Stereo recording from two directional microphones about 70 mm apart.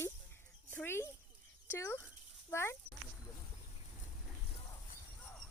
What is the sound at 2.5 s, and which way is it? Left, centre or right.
Speech, left.